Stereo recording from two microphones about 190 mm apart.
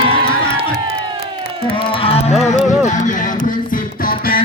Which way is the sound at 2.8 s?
40° left (ahead or behind).